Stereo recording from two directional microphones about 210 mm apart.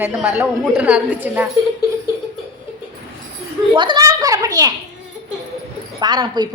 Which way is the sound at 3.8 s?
20° right (ahead or behind).